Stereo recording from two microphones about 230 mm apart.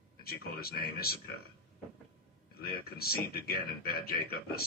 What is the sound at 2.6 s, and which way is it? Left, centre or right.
Speech, left.